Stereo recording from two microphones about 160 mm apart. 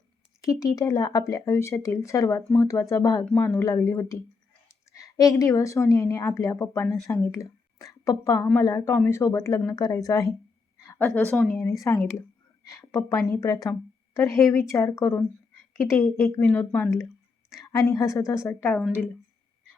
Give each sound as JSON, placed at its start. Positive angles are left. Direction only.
{"t": 0.4, "sound": "a woman's voice", "side_deg": 20}
{"t": 17.6, "sound": "speech", "side_deg": 20}